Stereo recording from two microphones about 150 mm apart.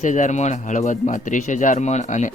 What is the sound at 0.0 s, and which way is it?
Speech, 55° left (ahead or behind).